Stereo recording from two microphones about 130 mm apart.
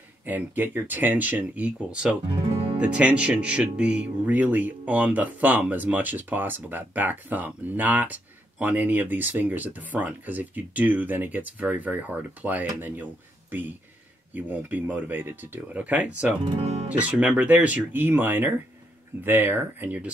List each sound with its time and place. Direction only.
0.2 s speech: 15° right (ahead or behind)
14.3 s speech: 15° right (ahead or behind)
16.4 s speech: 50° right (ahead or behind)
17.0 s speech: 10° right (ahead or behind)